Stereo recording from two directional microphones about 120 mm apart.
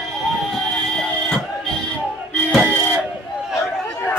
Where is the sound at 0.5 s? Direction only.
5° left (ahead or behind).